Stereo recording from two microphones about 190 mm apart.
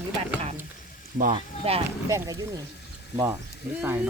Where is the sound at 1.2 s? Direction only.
35° right (ahead or behind).